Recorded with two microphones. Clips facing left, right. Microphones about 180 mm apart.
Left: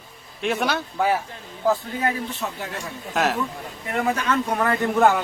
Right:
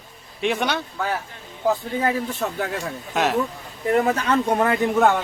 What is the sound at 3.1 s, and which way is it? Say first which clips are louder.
Speech: right 1 dB; centre (ahead or behind).